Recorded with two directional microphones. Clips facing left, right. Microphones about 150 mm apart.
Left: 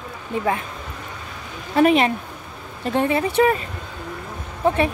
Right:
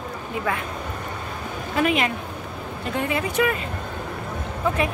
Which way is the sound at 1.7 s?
30° left (ahead or behind).